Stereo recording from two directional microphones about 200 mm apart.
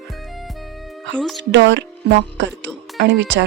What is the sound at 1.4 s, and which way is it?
Speech, 60° right (ahead or behind).